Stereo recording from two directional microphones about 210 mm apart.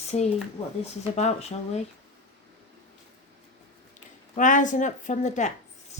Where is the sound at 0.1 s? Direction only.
30° left (ahead or behind).